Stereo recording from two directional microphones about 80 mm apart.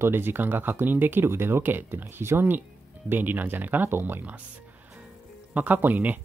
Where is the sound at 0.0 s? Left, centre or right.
Right.